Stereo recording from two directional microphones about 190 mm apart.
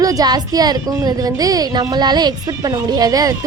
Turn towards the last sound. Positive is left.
turn(degrees=-20)  # may be behind; listen again after turning